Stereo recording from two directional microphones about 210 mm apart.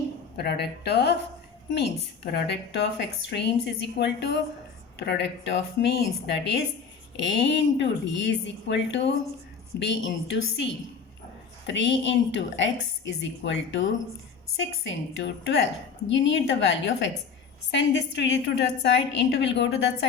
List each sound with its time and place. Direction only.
0.3 s a woman's voice: 50° left (ahead or behind)
2.2 s a woman's voice: 50° left (ahead or behind)